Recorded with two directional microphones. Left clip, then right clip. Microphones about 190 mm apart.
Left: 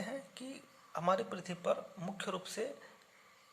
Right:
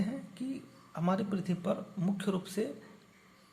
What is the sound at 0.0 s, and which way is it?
Speech, 25° left (ahead or behind).